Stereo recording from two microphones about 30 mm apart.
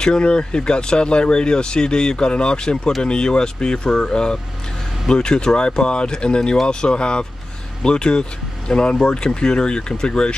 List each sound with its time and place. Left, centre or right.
0.0 s speech: left